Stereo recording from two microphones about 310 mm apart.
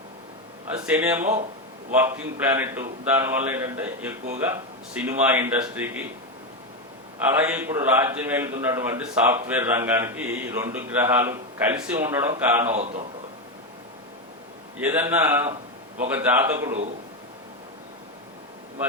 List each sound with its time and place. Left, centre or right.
0.9 s a man's voice: centre
7.3 s a man's voice: centre
12.7 s a man's voice: right
14.8 s a man's voice: centre